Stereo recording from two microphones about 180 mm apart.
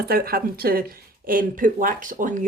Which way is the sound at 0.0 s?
55° right (ahead or behind).